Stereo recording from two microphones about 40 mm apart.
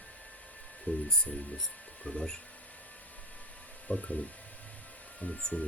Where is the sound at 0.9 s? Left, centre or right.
Left.